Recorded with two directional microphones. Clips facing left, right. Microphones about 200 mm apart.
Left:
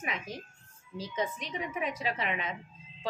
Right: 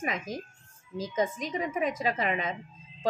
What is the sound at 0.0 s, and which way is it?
A woman's voice, 45° right (ahead or behind).